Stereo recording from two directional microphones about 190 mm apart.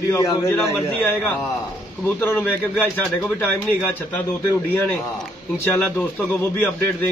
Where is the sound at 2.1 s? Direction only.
10° left (ahead or behind).